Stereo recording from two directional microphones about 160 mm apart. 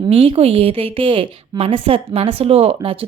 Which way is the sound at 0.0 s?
35° right (ahead or behind).